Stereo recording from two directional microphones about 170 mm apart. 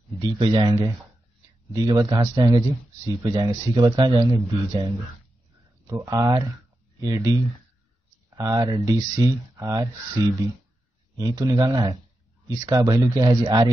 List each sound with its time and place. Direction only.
0.2 s speech: 30° right (ahead or behind)